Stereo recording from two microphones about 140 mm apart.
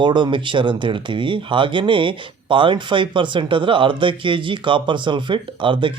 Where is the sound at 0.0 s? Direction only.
35° right (ahead or behind).